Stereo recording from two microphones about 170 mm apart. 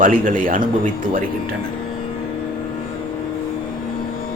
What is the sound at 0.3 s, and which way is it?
Speech, 55° right (ahead or behind).